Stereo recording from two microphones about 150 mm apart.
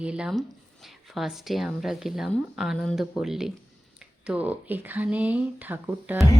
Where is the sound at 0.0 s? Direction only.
5° right (ahead or behind).